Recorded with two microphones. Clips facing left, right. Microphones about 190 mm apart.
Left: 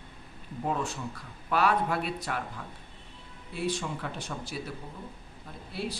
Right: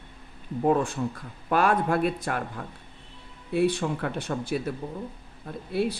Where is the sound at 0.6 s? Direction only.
50° right (ahead or behind).